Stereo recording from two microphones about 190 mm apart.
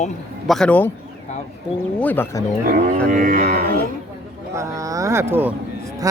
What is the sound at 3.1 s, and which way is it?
Music, 45° right (ahead or behind).